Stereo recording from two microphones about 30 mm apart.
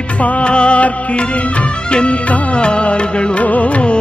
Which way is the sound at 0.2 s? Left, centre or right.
Left.